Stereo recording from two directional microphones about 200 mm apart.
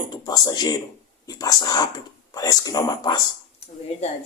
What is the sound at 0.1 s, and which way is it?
Speech, 20° left (ahead or behind).